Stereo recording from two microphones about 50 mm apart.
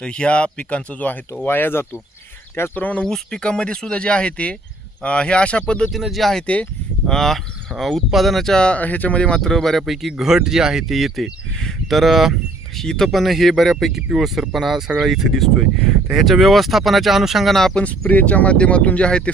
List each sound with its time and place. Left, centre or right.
0.0 s speech: centre
1.5 s speech: left
2.7 s speech: left
3.0 s speech: centre
6.0 s speech: centre
8.5 s speech: centre
8.8 s speech: left
9.4 s speech: centre
12.7 s speech: centre
17.7 s speech: left
18.1 s speech: left